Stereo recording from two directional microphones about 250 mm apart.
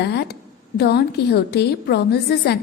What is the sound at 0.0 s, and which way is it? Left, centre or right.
A woman's voice, left.